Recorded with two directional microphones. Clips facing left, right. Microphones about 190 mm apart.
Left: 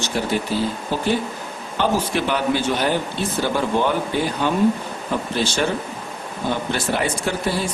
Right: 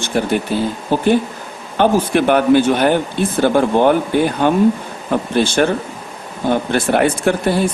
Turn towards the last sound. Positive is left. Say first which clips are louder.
# right 7 dB
turn(degrees=-60)  # may be behind; listen again after turning